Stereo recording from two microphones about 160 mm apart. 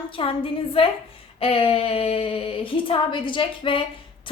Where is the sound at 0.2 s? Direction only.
35° left (ahead or behind).